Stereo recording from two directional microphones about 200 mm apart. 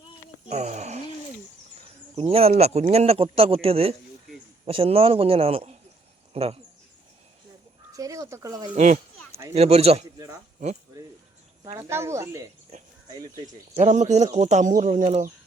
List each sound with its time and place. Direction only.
0.5 s speech: 35° right (ahead or behind)
2.1 s a man's voice: 30° right (ahead or behind)
7.9 s speech: 15° right (ahead or behind)
8.7 s speech: 40° right (ahead or behind)
11.8 s speech: 15° right (ahead or behind)
13.7 s speech: 35° right (ahead or behind)